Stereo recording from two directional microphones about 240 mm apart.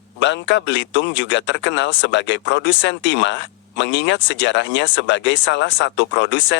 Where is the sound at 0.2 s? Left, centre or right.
Left.